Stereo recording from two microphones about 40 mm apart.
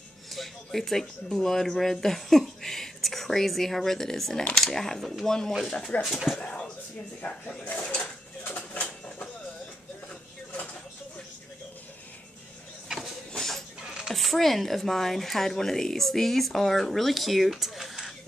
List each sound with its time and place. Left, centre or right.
0.3 s speech: centre
6.1 s speech: centre
7.2 s speech: left
8.5 s bird: left
13.4 s a sound: centre
13.8 s a sound: centre
14.1 s speech: centre